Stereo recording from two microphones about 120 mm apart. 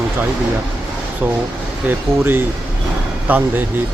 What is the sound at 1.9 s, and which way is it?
Speech, 20° right (ahead or behind).